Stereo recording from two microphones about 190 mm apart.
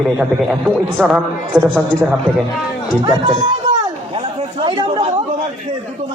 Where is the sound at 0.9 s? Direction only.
10° right (ahead or behind).